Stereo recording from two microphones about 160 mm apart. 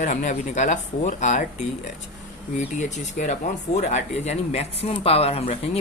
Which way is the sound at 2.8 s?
45° left (ahead or behind).